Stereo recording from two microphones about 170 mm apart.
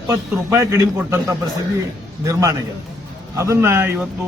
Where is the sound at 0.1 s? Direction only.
15° right (ahead or behind).